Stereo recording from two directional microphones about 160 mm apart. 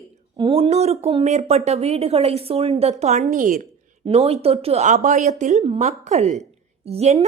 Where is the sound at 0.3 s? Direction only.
35° right (ahead or behind); by 3.5 s 50° right (ahead or behind).